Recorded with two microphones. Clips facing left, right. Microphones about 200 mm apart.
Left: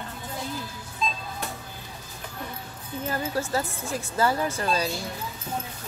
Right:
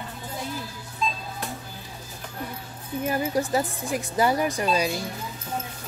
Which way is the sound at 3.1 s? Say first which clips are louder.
Right 3 dB; 15° right (ahead or behind).